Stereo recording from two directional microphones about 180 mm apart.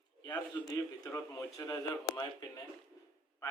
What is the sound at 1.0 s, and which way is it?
A man's voice, 15° left (ahead or behind).